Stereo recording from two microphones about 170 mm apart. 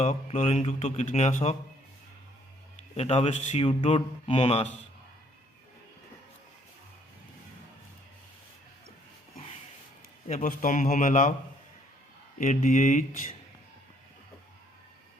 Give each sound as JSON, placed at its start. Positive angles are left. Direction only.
{"t": 0.0, "sound": "speech", "side_deg": 40}
{"t": 2.9, "sound": "speech", "side_deg": 35}
{"t": 10.2, "sound": "a man's voice", "side_deg": 45}
{"t": 12.4, "sound": "a man's voice", "side_deg": 45}